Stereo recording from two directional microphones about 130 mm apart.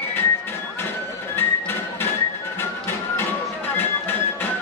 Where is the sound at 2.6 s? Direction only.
20° left (ahead or behind).